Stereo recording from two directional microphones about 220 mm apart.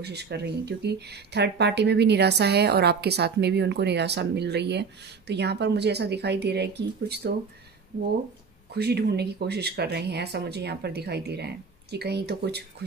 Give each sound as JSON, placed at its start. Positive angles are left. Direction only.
{"t": 0.0, "sound": "speech", "side_deg": -50}
{"t": 8.7, "sound": "speech", "side_deg": -50}